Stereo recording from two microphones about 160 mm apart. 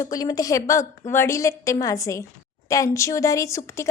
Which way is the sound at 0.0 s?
25° left (ahead or behind).